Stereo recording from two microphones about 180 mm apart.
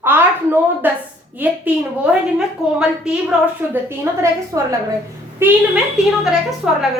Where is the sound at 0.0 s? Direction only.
10° right (ahead or behind).